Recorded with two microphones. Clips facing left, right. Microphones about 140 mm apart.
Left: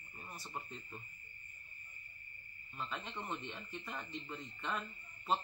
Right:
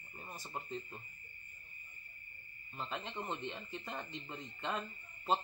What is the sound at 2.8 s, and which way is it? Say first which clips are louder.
Speech: right 2 dB; 25° right (ahead or behind).